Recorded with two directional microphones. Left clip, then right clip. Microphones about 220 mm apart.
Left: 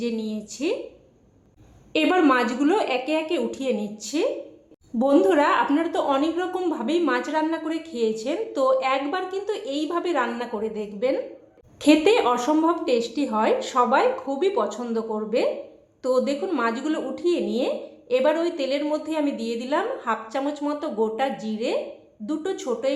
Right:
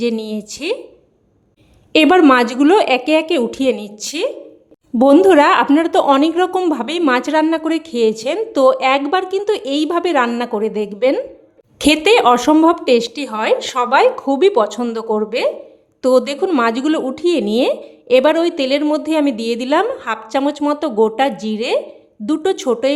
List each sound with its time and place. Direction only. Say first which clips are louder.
0.0 s a woman's voice: right 9 dB; 45° right (ahead or behind)
1.9 s a woman's voice: right 10 dB; 45° right (ahead or behind)